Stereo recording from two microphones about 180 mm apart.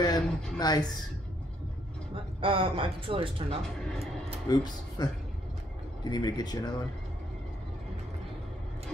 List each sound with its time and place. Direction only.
0.0 s speech: 20° left (ahead or behind)
2.4 s speech: 30° right (ahead or behind)
4.5 s speech: 20° left (ahead or behind)